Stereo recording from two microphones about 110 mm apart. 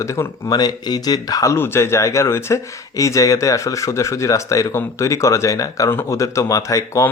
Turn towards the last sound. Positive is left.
turn(degrees=30)  # may be behind; listen again after turning